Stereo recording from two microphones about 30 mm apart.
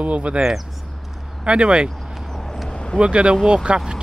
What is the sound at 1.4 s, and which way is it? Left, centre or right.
Speech, right.